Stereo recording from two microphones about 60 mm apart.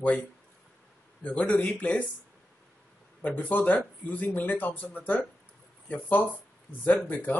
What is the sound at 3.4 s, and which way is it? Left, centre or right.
Speech, left.